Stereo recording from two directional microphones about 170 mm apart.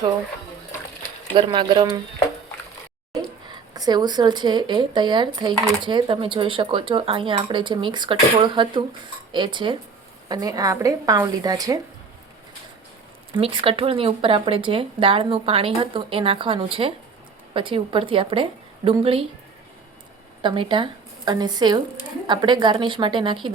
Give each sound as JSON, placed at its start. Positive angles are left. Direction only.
{"t": 1.3, "sound": "speech", "side_deg": -30}
{"t": 3.8, "sound": "speech", "side_deg": -25}
{"t": 13.3, "sound": "speech", "side_deg": -30}
{"t": 20.4, "sound": "a woman's voice", "side_deg": -30}